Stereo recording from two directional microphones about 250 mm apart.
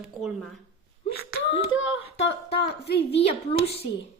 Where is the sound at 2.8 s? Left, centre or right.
Left.